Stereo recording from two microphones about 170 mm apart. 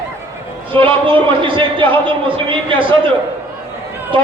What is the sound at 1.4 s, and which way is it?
A man's voice, 30° right (ahead or behind).